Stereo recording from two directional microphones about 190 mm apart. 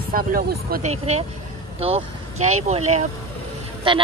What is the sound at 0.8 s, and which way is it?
A man's voice, 35° right (ahead or behind).